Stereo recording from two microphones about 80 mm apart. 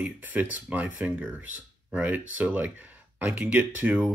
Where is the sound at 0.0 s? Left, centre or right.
Right.